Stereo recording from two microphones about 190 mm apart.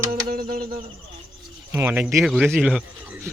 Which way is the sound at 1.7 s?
10° right (ahead or behind).